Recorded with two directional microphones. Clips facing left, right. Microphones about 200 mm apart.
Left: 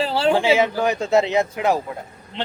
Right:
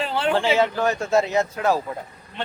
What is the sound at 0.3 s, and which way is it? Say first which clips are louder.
A man's voice: left 2 dB; 10° left (ahead or behind).